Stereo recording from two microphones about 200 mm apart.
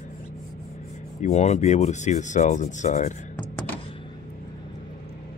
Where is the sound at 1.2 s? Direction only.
35° left (ahead or behind).